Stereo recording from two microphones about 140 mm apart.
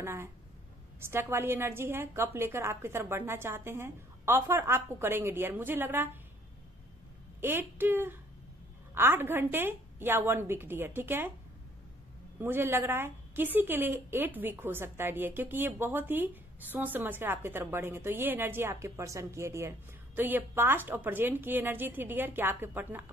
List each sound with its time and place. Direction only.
0.0 s a woman's voice: 20° right (ahead or behind)
7.3 s a woman's voice: 15° right (ahead or behind)
12.4 s a woman's voice: 15° right (ahead or behind)